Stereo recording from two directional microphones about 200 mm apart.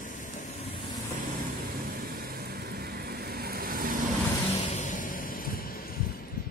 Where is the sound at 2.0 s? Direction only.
50° right (ahead or behind).